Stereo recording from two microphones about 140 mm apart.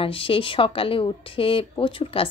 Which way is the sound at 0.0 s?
40° left (ahead or behind).